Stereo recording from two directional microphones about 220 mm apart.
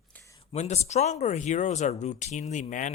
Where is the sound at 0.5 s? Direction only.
30° left (ahead or behind).